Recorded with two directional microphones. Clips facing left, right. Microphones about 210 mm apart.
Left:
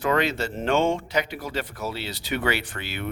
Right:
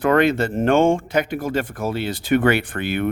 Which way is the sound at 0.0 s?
55° right (ahead or behind).